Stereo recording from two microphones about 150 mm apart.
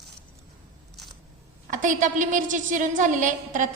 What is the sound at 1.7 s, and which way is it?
A woman's voice, 60° right (ahead or behind).